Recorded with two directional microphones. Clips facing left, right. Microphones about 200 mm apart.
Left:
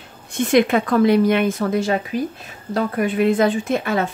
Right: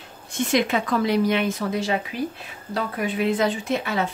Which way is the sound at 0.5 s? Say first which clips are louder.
Left 6 dB; 55° left (ahead or behind).